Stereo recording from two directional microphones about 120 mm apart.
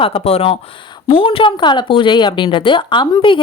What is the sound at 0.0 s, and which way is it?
Speech, 50° left (ahead or behind).